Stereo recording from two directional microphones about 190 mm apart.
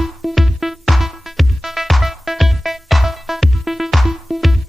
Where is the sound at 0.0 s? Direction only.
Centre (ahead or behind).